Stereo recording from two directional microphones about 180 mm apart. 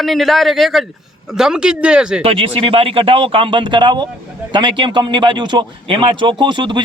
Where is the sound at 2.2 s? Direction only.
30° right (ahead or behind).